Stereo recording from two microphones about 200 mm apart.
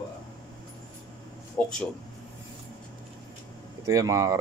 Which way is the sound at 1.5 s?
5° left (ahead or behind).